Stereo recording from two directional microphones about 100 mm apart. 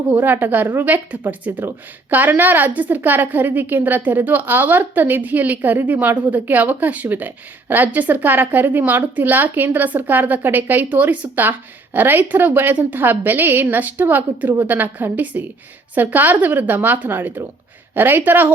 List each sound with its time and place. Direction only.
0.1 s a woman's voice: 20° right (ahead or behind)